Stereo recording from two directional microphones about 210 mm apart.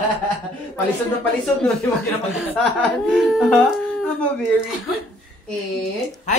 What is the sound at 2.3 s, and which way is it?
A woman's voice, centre (ahead or behind).